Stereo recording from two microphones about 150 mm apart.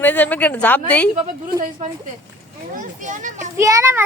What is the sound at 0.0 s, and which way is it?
A woman's voice, 10° left (ahead or behind).